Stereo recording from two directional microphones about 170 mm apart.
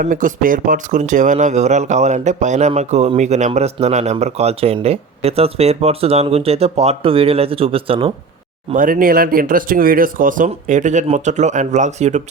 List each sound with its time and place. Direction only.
0.0 s speech: 50° right (ahead or behind); by 8.1 s 35° right (ahead or behind)
8.7 s speech: 55° right (ahead or behind)